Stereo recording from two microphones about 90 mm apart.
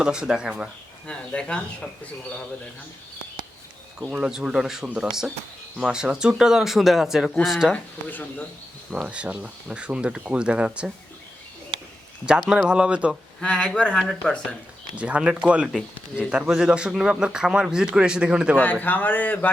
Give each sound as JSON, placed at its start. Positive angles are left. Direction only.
{"t": 0.0, "sound": "speech", "side_deg": -10}
{"t": 1.0, "sound": "speech", "side_deg": 10}
{"t": 4.0, "sound": "speech", "side_deg": -10}
{"t": 7.7, "sound": "speech", "side_deg": 20}
{"t": 9.0, "sound": "speech", "side_deg": -10}
{"t": 12.2, "sound": "speech", "side_deg": -10}
{"t": 13.4, "sound": "speech", "side_deg": 10}
{"t": 14.9, "sound": "speech", "side_deg": -15}
{"t": 18.5, "sound": "speech", "side_deg": 20}